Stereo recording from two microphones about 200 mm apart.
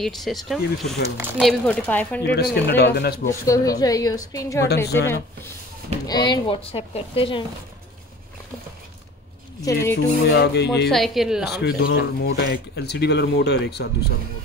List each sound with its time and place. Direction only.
0.0 s speech: centre (ahead or behind)
1.0 s speech: 15° right (ahead or behind)
1.4 s a woman's voice: 5° left (ahead or behind)
2.3 s speech: 55° left (ahead or behind)
3.3 s a woman's voice: 15° left (ahead or behind)
9.6 s speech: 15° left (ahead or behind)
10.2 s speech: 55° left (ahead or behind)
10.9 s speech: centre (ahead or behind)
11.6 s speech: 55° left (ahead or behind)